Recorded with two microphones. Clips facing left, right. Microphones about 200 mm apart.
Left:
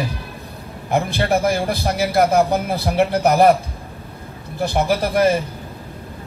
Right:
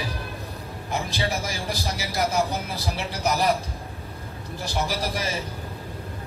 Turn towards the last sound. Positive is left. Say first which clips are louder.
# left 12 dB
turn(degrees=55)  # may be behind; listen again after turning